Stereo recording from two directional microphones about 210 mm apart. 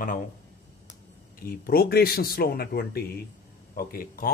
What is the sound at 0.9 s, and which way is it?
Speech, 45° left (ahead or behind).